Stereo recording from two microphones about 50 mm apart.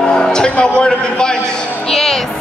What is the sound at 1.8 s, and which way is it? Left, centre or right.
Music, centre.